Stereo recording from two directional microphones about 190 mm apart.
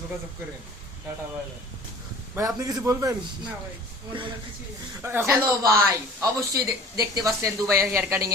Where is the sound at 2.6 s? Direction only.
20° right (ahead or behind).